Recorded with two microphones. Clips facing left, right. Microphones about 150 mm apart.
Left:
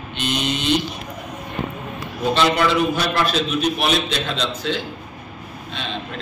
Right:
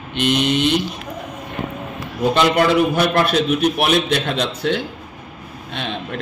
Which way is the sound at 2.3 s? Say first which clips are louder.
Right 3 dB; 50° right (ahead or behind).